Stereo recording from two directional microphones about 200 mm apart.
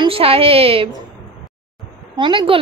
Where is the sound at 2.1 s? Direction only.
25° right (ahead or behind).